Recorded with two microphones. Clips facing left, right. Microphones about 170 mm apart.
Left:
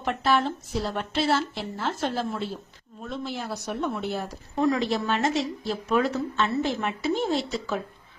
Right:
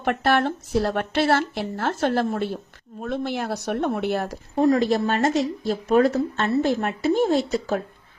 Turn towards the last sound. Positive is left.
turn(degrees=-45)  # may be behind; listen again after turning